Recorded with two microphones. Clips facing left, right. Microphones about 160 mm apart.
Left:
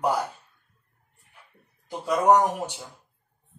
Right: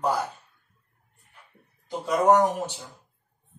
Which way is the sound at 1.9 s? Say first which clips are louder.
Even; 10° left (ahead or behind).